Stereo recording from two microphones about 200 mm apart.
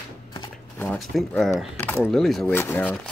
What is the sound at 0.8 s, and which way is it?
Speech, 5° left (ahead or behind).